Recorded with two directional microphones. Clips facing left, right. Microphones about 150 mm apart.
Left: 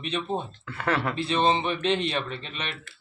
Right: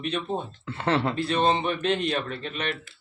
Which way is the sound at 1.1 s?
Centre (ahead or behind).